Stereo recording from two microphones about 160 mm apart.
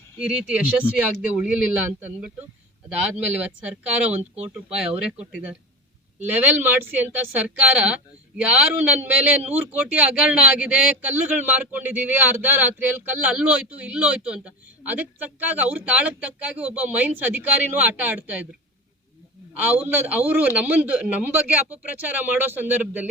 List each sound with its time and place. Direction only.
0.2 s a man's voice: 5° right (ahead or behind)
19.5 s a man's voice: 10° right (ahead or behind)